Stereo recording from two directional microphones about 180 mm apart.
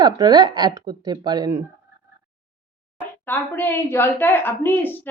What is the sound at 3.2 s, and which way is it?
A woman's voice, 10° left (ahead or behind).